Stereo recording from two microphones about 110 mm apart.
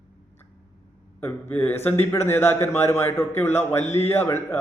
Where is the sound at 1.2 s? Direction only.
20° left (ahead or behind).